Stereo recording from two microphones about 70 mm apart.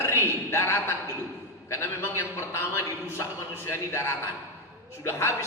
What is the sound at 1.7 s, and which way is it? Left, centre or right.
Speech, left.